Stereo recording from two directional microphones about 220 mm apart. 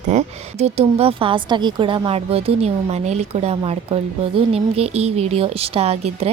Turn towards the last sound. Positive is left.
turn(degrees=-30)  # may be behind; listen again after turning